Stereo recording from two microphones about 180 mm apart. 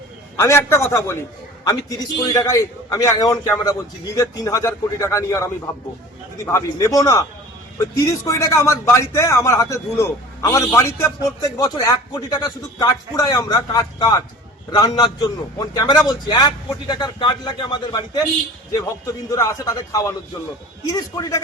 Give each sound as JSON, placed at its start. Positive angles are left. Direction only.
{"t": 0.3, "sound": "speech", "side_deg": 15}
{"t": 2.2, "sound": "a man's voice", "side_deg": 20}